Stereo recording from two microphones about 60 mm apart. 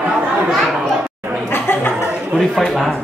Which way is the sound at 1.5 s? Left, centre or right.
Left.